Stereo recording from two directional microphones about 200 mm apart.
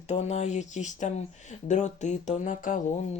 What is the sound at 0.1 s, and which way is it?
Speech, 35° left (ahead or behind).